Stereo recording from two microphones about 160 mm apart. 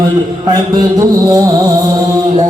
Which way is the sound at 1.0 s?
25° right (ahead or behind).